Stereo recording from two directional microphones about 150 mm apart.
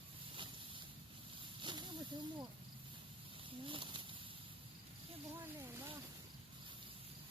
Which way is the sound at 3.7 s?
35° right (ahead or behind).